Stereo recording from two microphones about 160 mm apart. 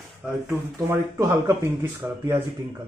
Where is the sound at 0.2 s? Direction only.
Centre (ahead or behind).